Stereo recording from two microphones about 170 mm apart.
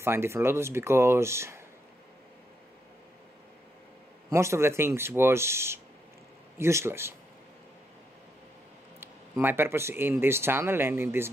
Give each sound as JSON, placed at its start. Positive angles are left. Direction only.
{"t": 0.0, "sound": "speech", "side_deg": -15}
{"t": 4.3, "sound": "speech", "side_deg": -15}
{"t": 9.0, "sound": "speech", "side_deg": -15}